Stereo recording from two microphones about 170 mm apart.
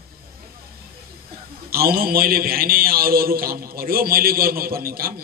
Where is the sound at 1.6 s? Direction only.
60° right (ahead or behind).